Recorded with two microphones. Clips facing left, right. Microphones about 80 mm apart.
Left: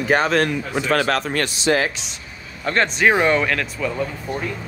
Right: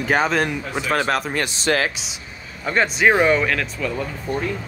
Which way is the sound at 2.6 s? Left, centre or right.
Centre.